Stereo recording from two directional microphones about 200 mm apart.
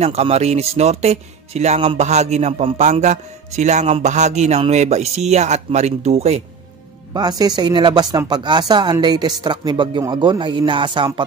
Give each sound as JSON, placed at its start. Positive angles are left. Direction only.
{"t": 0.0, "sound": "speech", "side_deg": -30}
{"t": 7.2, "sound": "speech", "side_deg": -20}